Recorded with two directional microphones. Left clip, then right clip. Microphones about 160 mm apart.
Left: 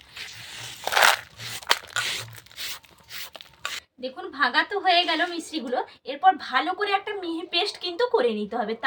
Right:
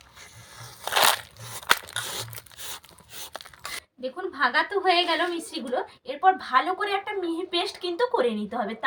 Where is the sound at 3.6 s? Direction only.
5° left (ahead or behind).